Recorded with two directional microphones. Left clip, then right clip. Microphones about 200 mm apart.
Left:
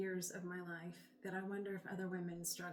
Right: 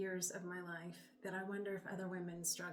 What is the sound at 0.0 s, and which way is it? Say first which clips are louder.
A woman's voice: right 1 dB; 20° right (ahead or behind).